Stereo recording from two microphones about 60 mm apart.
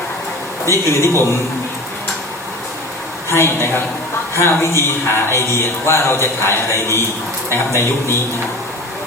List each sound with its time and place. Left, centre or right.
0.9 s speech: left
3.2 s speech: left